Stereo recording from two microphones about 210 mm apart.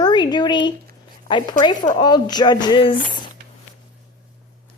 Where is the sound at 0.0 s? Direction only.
20° left (ahead or behind).